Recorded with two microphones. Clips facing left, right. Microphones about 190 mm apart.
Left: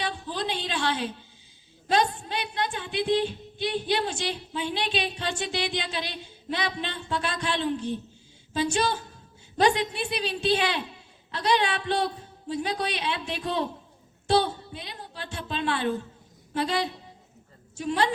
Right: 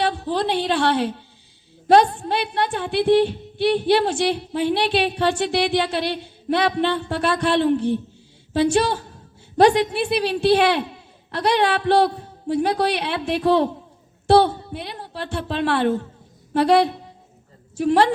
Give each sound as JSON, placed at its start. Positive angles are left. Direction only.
{"t": 0.0, "sound": "a woman's voice", "side_deg": -60}